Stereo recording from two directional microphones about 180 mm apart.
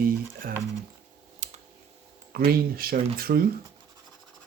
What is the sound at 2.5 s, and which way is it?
Speech, 55° right (ahead or behind).